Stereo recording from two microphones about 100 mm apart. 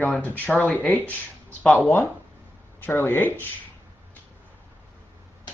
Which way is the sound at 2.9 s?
20° left (ahead or behind).